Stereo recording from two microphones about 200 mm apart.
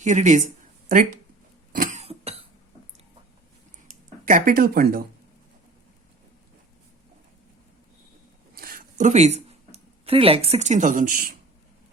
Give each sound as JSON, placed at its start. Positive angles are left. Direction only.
{"t": 0.0, "sound": "speech", "side_deg": -35}
{"t": 1.7, "sound": "cough", "side_deg": -40}
{"t": 3.8, "sound": "speech", "side_deg": -40}
{"t": 8.5, "sound": "a sound", "side_deg": -45}